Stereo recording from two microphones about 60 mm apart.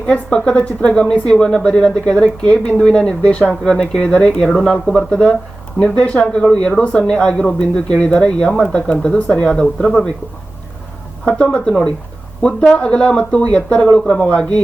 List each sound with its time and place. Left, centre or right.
0.1 s speech: centre
11.3 s speech: left